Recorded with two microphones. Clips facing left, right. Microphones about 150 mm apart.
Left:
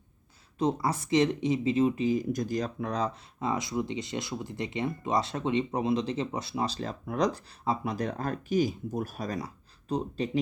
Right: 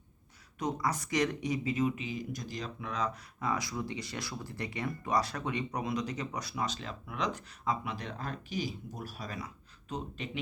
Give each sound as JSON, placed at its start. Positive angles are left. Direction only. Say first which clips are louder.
{"t": 0.6, "sound": "speech", "louder": "left 5 dB", "side_deg": 30}
{"t": 2.0, "sound": "speech", "louder": "left 11 dB", "side_deg": 45}